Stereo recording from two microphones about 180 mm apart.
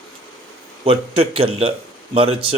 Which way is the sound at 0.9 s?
30° right (ahead or behind).